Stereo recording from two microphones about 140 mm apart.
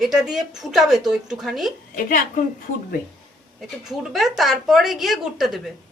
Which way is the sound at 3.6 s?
Centre (ahead or behind).